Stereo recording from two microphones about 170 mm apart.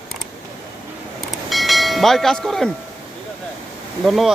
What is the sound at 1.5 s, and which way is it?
Church bell, centre (ahead or behind).